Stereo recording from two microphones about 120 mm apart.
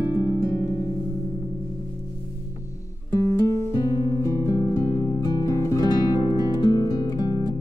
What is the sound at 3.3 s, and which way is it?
Guitar, 20° left (ahead or behind).